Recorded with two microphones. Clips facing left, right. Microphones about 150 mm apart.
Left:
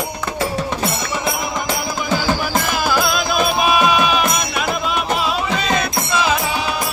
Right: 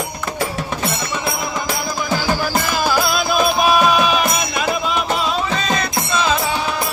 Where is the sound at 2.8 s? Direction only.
Centre (ahead or behind).